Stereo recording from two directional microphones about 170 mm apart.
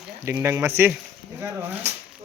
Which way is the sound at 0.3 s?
15° right (ahead or behind).